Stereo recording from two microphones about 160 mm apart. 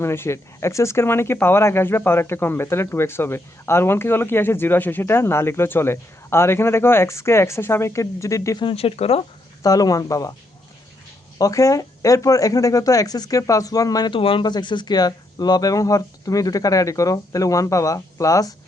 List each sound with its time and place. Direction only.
0.0 s speech: 15° left (ahead or behind); by 9.2 s 40° left (ahead or behind)
9.6 s speech: 20° left (ahead or behind)
11.3 s speech: 20° left (ahead or behind)